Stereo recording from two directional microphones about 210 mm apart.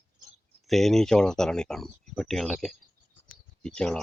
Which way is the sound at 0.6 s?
Centre (ahead or behind).